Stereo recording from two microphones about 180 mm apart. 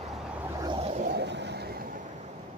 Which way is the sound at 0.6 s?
30° right (ahead or behind).